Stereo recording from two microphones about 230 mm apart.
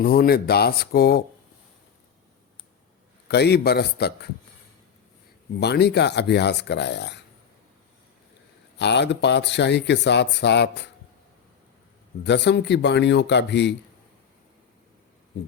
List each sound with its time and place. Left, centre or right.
0.0 s speech: left
3.2 s speech: left
5.5 s speech: left
8.8 s speech: left
12.2 s speech: left